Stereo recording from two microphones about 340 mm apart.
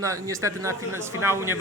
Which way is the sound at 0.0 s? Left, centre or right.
Centre.